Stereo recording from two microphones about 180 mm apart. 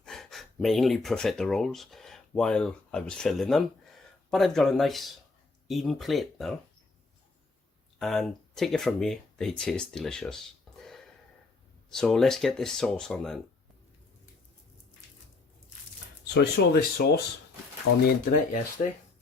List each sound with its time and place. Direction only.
0.0 s speech: centre (ahead or behind)
7.9 s speech: centre (ahead or behind)
11.9 s speech: 5° left (ahead or behind)
16.2 s speech: 65° left (ahead or behind); by 18.9 s 50° left (ahead or behind)